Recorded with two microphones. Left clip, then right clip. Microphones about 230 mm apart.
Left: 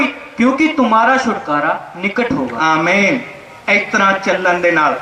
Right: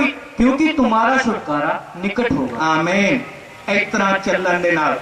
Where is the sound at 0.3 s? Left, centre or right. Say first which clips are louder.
Left 3 dB; centre.